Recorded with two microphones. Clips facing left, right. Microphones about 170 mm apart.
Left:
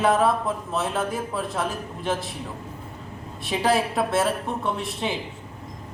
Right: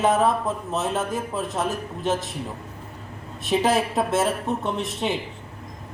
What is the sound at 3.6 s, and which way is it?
Speech, 20° right (ahead or behind).